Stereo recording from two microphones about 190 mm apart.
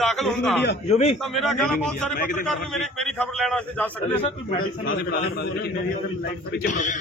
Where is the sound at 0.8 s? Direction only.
35° left (ahead or behind).